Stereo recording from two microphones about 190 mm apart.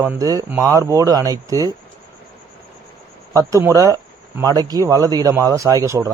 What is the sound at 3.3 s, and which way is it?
A man's voice, 20° right (ahead or behind).